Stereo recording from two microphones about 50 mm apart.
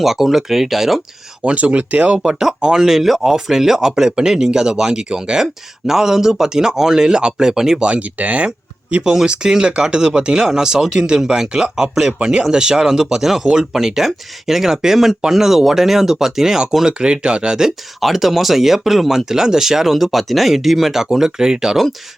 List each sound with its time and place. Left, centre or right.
0.0 s speech: centre
1.5 s speech: right
2.1 s speech: centre
7.9 s speech: right
8.4 s a sound: centre
9.1 s speech: centre